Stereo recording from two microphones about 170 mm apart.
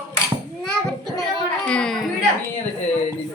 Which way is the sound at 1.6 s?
5° left (ahead or behind).